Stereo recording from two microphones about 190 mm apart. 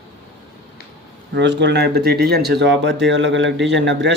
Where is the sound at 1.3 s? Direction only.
65° right (ahead or behind).